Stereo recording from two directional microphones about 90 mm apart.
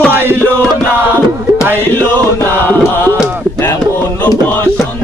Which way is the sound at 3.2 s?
20° right (ahead or behind).